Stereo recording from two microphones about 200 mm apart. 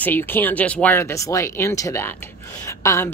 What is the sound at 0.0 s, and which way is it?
Speech, 10° left (ahead or behind).